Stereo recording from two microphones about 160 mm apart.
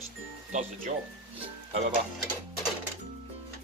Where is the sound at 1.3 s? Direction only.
35° right (ahead or behind).